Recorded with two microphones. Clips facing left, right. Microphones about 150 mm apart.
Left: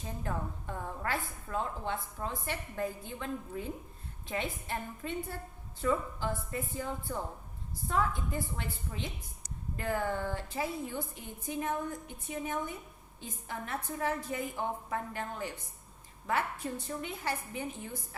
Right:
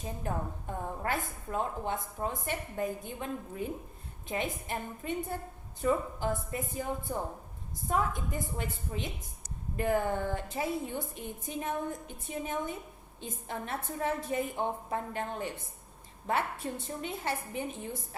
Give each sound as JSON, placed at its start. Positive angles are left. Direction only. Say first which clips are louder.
{"t": 1.0, "sound": "a woman's voice", "louder": "right 1 dB", "side_deg": -20}